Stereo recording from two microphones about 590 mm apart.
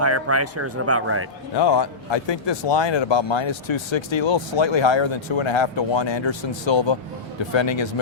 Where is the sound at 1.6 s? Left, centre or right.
Left.